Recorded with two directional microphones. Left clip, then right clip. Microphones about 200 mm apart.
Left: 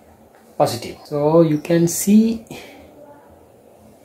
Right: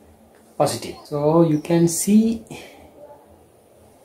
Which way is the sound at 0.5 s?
15° left (ahead or behind).